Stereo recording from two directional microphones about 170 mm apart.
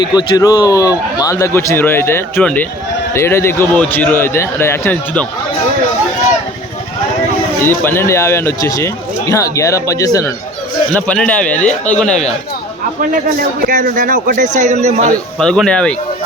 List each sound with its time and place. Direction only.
0.0 s speech: 25° left (ahead or behind)
7.6 s speech: 15° left (ahead or behind)
10.9 s speech: 5° left (ahead or behind)
13.7 s a man's voice: 55° right (ahead or behind)
15.4 s speech: 5° left (ahead or behind)